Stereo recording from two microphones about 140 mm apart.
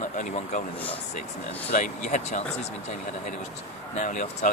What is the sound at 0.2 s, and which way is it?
Speech, 65° left (ahead or behind).